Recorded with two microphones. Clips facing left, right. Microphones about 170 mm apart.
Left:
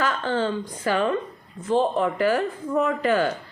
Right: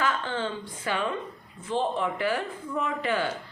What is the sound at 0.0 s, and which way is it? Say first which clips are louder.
A woman's voice: left 5 dB; 40° left (ahead or behind).